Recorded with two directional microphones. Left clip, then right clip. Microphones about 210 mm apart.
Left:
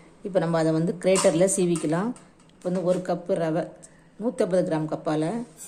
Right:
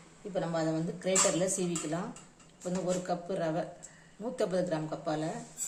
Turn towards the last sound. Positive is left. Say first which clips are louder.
# left 8 dB
turn(degrees=35)  # may be behind; listen again after turning